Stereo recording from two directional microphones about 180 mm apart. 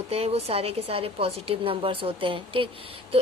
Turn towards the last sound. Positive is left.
turn(degrees=-30)  # may be behind; listen again after turning